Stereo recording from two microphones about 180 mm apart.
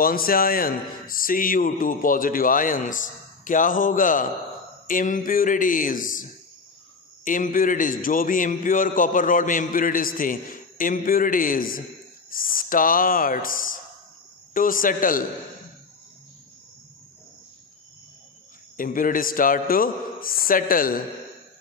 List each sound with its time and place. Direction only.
0.0 s a man's voice: 55° left (ahead or behind)
7.2 s a man's voice: 45° left (ahead or behind)
18.8 s a man's voice: 50° left (ahead or behind)